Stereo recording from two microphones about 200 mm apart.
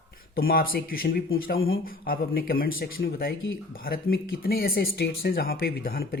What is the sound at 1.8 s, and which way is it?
Speech, 50° left (ahead or behind).